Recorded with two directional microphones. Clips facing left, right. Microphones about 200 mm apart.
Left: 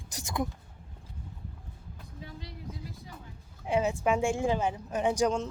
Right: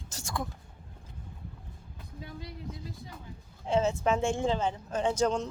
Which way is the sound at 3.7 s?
15° left (ahead or behind).